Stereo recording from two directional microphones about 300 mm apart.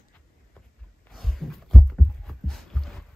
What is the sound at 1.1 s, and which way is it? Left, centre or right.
Heart sounds, centre.